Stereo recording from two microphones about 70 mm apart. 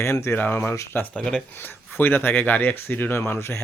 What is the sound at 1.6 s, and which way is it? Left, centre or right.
Speech, left.